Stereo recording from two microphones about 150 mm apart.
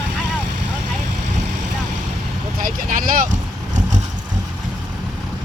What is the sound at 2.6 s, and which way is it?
Speech, 65° right (ahead or behind).